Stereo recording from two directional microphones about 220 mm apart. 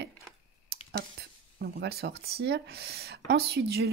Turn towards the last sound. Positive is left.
turn(degrees=-45)  # may be behind; listen again after turning